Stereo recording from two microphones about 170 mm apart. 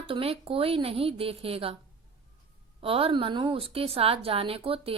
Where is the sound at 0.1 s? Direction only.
35° right (ahead or behind).